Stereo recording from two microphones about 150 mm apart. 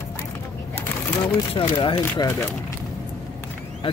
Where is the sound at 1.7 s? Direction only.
30° left (ahead or behind).